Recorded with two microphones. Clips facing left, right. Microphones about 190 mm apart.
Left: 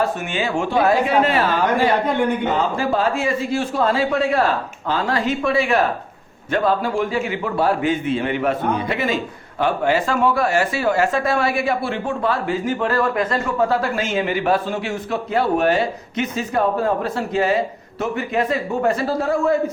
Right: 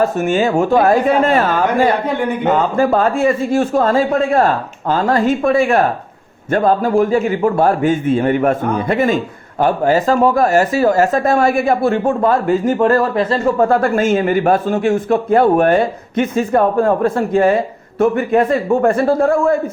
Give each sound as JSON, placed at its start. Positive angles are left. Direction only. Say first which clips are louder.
{"t": 0.0, "sound": "a man's voice", "louder": "right 7 dB", "side_deg": -45}
{"t": 13.1, "sound": "speech", "louder": "right 6 dB", "side_deg": -30}
{"t": 13.6, "sound": "a man's voice", "louder": "right 5 dB", "side_deg": -50}